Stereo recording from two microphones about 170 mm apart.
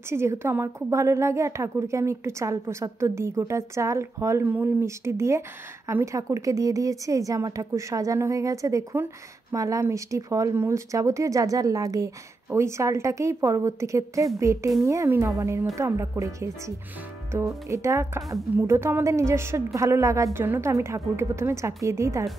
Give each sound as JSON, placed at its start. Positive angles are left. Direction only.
{"t": 0.1, "sound": "a woman's voice", "side_deg": -15}